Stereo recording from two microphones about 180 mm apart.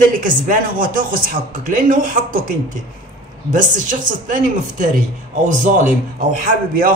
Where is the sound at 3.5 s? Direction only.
45° right (ahead or behind).